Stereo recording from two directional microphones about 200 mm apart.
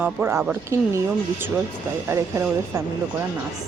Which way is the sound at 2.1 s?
15° right (ahead or behind).